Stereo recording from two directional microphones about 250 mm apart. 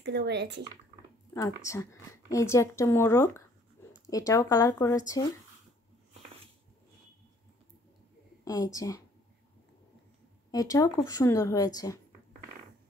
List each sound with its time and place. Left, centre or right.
0.0 s speech: right
1.3 s speech: centre
8.5 s speech: centre
10.5 s speech: centre